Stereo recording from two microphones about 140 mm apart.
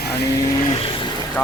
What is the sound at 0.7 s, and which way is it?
Vehicle, 40° left (ahead or behind).